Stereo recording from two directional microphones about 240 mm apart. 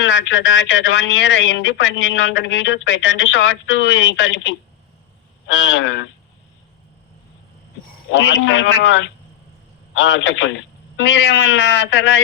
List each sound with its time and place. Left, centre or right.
0.0 s speech: left
8.1 s speech: left